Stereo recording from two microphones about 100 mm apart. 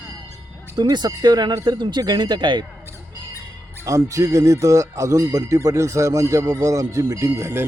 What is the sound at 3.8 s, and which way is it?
Speech, 35° right (ahead or behind).